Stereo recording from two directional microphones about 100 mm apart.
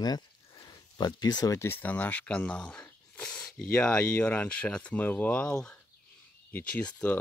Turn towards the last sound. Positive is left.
turn(degrees=15)  # may be behind; listen again after turning